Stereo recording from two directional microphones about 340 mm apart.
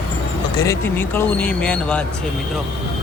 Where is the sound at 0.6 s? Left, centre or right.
Centre.